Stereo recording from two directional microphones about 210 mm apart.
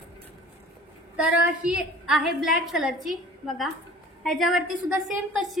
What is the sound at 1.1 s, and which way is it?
A woman's voice, 5° right (ahead or behind).